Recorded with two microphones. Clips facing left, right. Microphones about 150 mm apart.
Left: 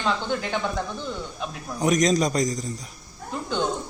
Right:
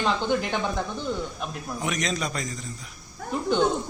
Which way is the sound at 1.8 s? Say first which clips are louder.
Left 9 dB; 40° left (ahead or behind).